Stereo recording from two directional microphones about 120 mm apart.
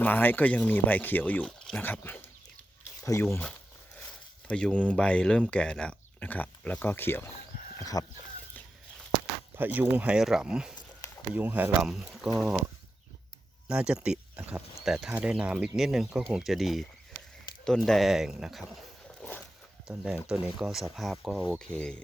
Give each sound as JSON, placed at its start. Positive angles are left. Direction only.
{"t": 0.0, "sound": "speech", "side_deg": 15}
{"t": 4.4, "sound": "speech", "side_deg": 10}
{"t": 7.8, "sound": "speech", "side_deg": 30}
{"t": 9.6, "sound": "speech", "side_deg": -15}
{"t": 11.3, "sound": "speech", "side_deg": -15}
{"t": 11.8, "sound": "speech", "side_deg": -5}
{"t": 13.7, "sound": "speech", "side_deg": -5}
{"t": 19.2, "sound": "walk", "side_deg": 5}
{"t": 20.2, "sound": "speech", "side_deg": -5}